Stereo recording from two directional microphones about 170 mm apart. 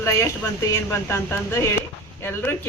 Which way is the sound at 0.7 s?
15° left (ahead or behind).